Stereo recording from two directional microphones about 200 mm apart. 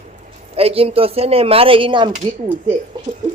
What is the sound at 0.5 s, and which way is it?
Speech, 30° right (ahead or behind).